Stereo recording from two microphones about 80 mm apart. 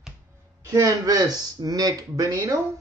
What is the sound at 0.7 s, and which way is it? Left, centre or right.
Speech, right.